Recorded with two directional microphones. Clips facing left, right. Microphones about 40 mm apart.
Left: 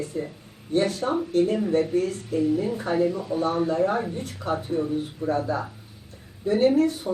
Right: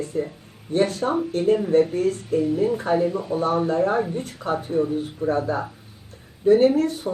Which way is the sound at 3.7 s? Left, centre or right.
Right.